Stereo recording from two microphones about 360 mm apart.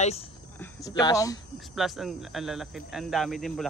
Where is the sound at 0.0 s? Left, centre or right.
Centre.